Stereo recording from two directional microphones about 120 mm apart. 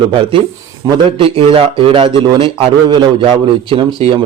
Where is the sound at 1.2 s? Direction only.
50° right (ahead or behind).